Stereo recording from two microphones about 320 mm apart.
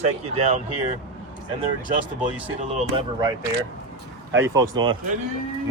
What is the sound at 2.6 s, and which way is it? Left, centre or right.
Speech, centre.